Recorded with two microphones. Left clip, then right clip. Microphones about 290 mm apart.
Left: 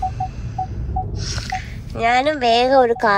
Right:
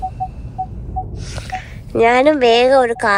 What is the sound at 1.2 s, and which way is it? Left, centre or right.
Speech, centre.